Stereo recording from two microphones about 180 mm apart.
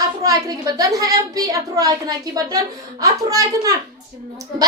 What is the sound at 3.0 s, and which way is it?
Speech, 20° right (ahead or behind).